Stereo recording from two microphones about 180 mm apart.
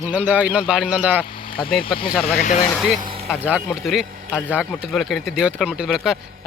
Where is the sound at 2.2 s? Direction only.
45° left (ahead or behind).